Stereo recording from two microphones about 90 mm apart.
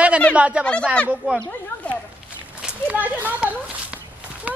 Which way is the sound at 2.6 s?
15° right (ahead or behind).